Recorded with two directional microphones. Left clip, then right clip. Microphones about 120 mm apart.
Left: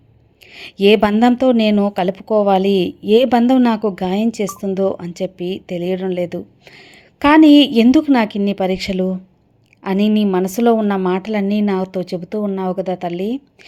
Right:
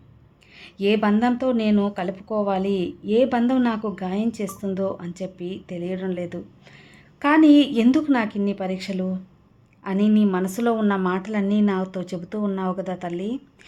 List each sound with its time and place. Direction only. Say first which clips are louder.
0.5 s a woman's voice: left 10 dB; 55° left (ahead or behind); by 13.4 s 35° left (ahead or behind)